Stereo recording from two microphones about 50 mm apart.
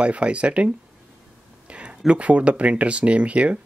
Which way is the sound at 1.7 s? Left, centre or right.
Right.